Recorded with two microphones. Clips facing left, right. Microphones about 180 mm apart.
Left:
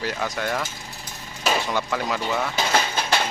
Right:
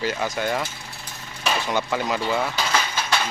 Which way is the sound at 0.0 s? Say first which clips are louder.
Right 2 dB; centre (ahead or behind).